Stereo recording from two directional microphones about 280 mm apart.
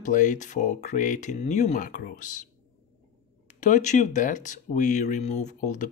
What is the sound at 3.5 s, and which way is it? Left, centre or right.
Speech, left.